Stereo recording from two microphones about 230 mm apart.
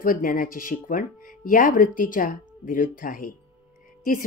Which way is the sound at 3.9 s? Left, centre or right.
Left.